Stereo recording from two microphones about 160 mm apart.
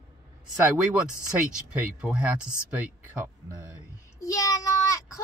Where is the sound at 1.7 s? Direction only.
5° right (ahead or behind).